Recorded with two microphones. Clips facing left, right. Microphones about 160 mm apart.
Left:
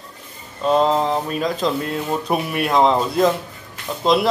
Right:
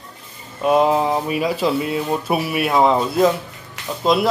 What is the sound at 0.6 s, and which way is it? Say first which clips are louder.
Speech: right 1 dB; 10° right (ahead or behind).